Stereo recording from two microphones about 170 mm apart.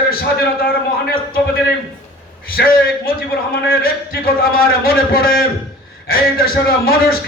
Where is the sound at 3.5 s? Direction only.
60° left (ahead or behind).